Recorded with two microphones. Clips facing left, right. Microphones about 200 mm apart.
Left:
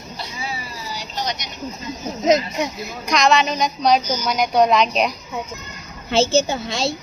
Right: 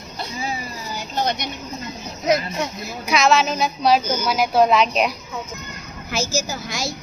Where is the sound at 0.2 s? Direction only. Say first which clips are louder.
Right 4 dB; 45° right (ahead or behind).